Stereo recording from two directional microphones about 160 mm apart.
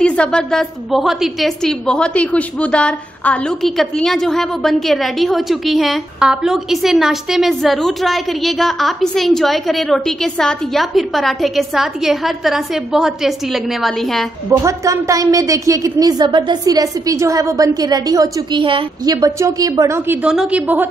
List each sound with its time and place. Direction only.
0.0 s a woman's voice: 5° left (ahead or behind)
14.6 s a woman's voice: 20° right (ahead or behind)
19.2 s a woman's voice: 20° right (ahead or behind)
20.2 s a woman's voice: 5° right (ahead or behind)